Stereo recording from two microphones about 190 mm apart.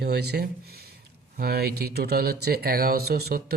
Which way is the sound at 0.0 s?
60° right (ahead or behind).